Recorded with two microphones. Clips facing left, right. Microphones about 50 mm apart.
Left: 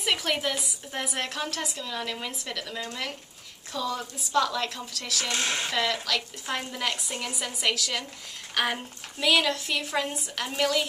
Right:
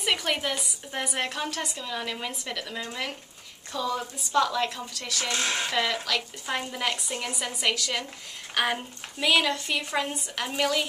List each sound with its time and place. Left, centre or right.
0.0 s a woman's voice: centre
5.3 s speech: right
5.7 s a woman's voice: centre